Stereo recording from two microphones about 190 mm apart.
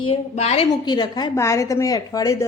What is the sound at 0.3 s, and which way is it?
A woman's voice, 30° left (ahead or behind).